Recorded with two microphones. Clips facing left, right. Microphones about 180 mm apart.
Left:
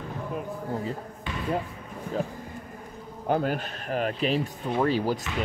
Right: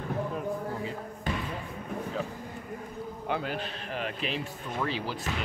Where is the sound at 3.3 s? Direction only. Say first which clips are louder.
Left 7 dB; 45° left (ahead or behind).